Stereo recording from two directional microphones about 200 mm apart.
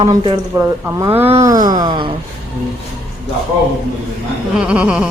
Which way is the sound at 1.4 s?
15° right (ahead or behind).